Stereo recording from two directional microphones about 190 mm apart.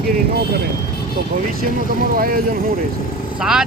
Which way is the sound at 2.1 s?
50° right (ahead or behind).